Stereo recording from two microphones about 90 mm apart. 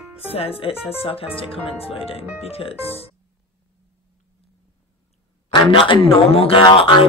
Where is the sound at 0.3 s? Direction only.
90° left.